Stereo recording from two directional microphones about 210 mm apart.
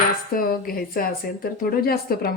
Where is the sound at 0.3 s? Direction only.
45° left (ahead or behind).